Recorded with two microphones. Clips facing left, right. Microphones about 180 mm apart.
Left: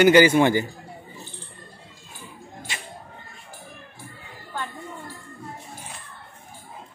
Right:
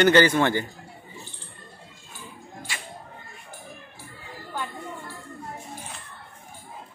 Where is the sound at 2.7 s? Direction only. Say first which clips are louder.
Left 1 dB; 20° left (ahead or behind).